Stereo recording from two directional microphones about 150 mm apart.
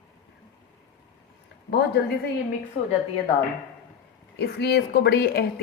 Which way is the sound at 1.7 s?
90° left.